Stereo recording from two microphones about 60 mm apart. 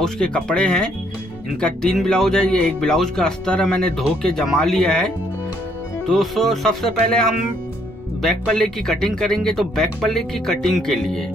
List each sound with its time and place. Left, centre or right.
0.0 s speech: centre
6.0 s music: centre
8.2 s speech: centre